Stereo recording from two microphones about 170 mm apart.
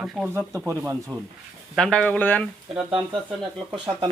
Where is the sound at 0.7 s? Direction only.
15° right (ahead or behind).